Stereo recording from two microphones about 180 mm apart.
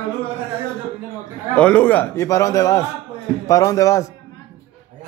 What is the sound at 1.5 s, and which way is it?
A man's voice, 10° left (ahead or behind).